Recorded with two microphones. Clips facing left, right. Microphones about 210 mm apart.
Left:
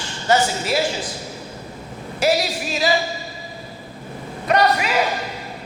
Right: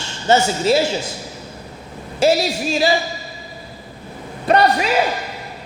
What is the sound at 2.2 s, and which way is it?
Speech, 25° right (ahead or behind).